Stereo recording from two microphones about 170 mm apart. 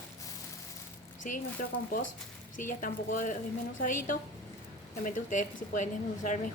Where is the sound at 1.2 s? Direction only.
50° left (ahead or behind).